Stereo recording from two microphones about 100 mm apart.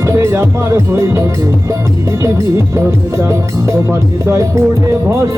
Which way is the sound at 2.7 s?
30° right (ahead or behind).